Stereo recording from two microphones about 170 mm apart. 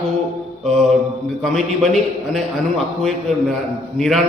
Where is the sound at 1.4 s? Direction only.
Centre (ahead or behind).